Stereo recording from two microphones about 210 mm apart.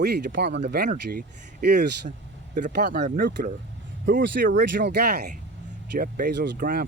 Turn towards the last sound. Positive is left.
turn(degrees=-45)  # may be behind; listen again after turning